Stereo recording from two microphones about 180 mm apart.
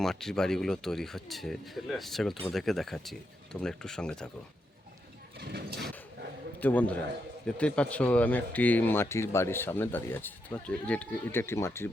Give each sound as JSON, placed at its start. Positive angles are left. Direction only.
{"t": 0.0, "sound": "speech", "side_deg": 0}
{"t": 5.4, "sound": "speech", "side_deg": -60}
{"t": 6.6, "sound": "speech", "side_deg": 10}